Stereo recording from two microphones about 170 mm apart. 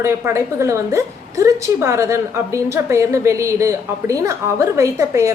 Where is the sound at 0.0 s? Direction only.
15° right (ahead or behind).